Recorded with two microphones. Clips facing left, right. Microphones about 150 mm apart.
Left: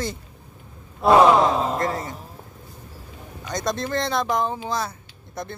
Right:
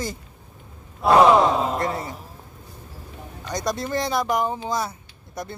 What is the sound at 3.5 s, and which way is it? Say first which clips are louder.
Speech: even; 10° right (ahead or behind).